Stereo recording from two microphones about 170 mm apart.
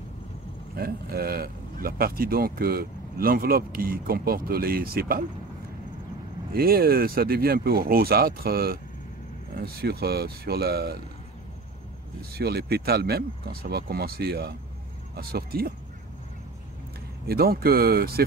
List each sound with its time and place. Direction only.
0.7 s speech: 65° right (ahead or behind)
6.5 s speech: 60° right (ahead or behind)
12.4 s speech: 65° right (ahead or behind)
17.3 s speech: 65° right (ahead or behind)